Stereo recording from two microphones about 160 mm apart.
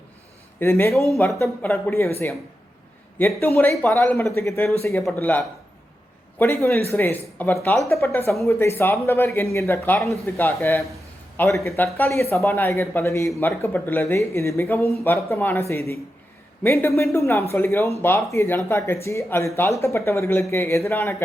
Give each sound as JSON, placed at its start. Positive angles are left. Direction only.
{"t": 0.6, "sound": "speech", "side_deg": 15}
{"t": 1.1, "sound": "speech", "side_deg": 0}
{"t": 1.9, "sound": "speech", "side_deg": 15}
{"t": 3.2, "sound": "a man's voice", "side_deg": 15}